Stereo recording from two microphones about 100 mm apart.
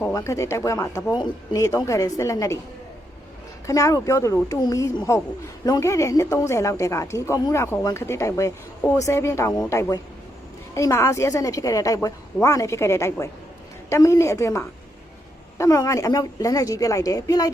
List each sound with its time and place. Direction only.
0.1 s a woman's voice: 35° left (ahead or behind)
3.7 s a woman's voice: 35° left (ahead or behind)